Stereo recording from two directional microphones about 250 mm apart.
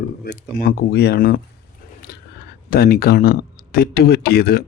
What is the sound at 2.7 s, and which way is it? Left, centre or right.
A man's voice, left.